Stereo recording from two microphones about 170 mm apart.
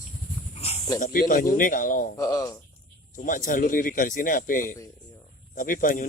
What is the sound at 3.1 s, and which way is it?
A man's voice, 50° left (ahead or behind).